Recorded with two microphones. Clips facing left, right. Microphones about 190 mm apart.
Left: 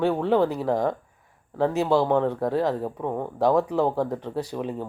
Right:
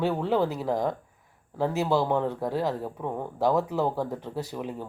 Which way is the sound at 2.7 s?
20° left (ahead or behind).